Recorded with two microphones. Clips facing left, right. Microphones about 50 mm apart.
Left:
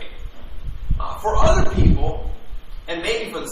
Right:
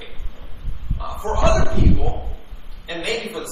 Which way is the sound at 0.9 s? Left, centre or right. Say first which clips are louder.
Left 3 dB; left.